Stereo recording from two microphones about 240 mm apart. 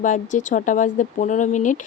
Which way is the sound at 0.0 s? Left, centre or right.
Left.